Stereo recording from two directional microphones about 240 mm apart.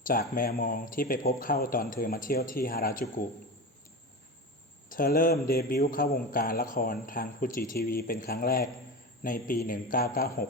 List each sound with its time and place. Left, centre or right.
0.1 s a man's voice: left
4.9 s a man's voice: left